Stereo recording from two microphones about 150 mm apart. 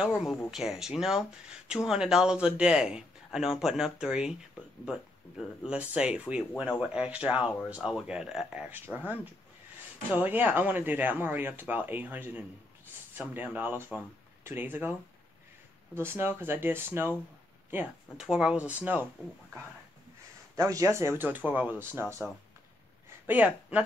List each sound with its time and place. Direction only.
0.0 s speech: 5° right (ahead or behind)
5.4 s speech: 5° right (ahead or behind)
15.9 s speech: 15° right (ahead or behind)
20.5 s speech: 20° right (ahead or behind)
23.2 s speech: 10° right (ahead or behind)